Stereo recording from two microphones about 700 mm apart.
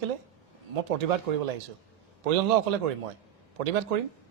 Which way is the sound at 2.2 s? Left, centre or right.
Right.